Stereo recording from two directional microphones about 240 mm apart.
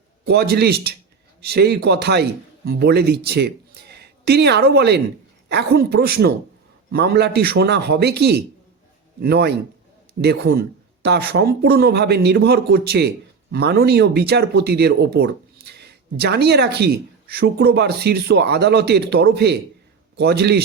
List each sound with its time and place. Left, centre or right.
0.3 s speech: right